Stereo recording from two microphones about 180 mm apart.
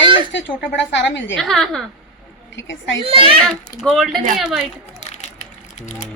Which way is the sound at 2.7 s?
90° left.